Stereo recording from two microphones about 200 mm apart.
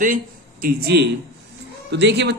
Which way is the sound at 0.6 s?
50° right (ahead or behind).